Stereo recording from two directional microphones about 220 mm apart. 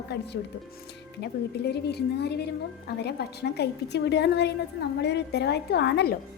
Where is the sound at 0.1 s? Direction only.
50° left (ahead or behind).